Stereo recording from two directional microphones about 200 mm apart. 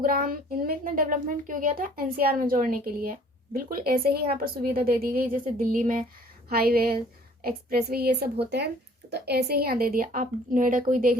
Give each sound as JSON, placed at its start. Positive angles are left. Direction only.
{"t": 0.0, "sound": "speech", "side_deg": -45}